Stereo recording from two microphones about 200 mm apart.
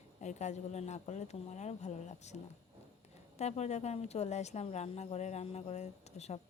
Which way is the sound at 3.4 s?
35° left (ahead or behind).